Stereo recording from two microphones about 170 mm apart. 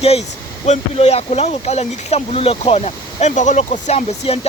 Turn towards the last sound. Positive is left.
turn(degrees=35)  # may be behind; listen again after turning